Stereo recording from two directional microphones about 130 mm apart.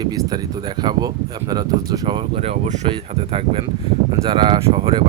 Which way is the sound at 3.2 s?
45° right (ahead or behind).